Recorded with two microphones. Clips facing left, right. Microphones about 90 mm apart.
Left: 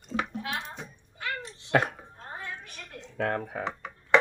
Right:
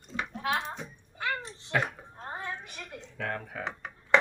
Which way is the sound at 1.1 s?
30° right (ahead or behind).